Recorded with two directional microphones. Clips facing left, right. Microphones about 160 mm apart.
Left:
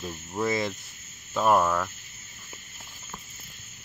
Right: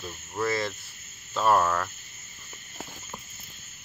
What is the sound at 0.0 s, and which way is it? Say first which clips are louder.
Speech: left 1 dB; 15° left (ahead or behind).